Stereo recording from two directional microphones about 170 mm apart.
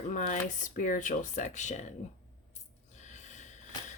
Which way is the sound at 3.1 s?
45° left (ahead or behind).